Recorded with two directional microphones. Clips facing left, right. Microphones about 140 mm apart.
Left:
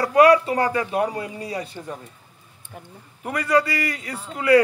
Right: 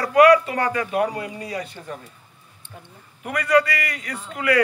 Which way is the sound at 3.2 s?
30° left (ahead or behind).